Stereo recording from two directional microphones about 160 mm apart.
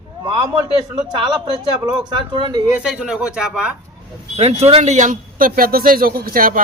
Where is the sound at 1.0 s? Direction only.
30° right (ahead or behind).